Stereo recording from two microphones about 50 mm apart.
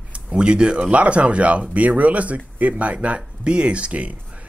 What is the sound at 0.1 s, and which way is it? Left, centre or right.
Speech, right.